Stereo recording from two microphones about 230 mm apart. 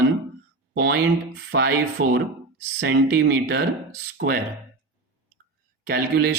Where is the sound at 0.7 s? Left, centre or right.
Right.